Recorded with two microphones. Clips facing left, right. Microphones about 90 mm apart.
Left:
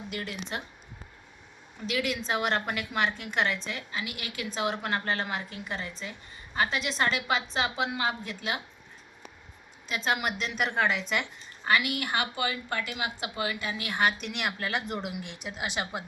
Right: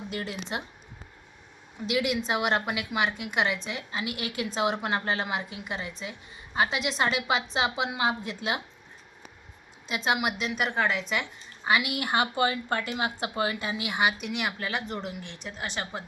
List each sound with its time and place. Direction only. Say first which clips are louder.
0.1 s a woman's voice: right 2 dB; 25° right (ahead or behind)
1.9 s a woman's voice: right 3 dB; 20° right (ahead or behind)
9.8 s a woman's voice: right 2 dB; 20° right (ahead or behind); by 11.3 s centre (ahead or behind)
11.6 s a woman's voice: right 1 dB; 15° right (ahead or behind); by 16.0 s 10° left (ahead or behind)